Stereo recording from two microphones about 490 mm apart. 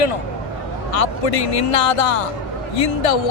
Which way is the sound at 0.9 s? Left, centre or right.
Left.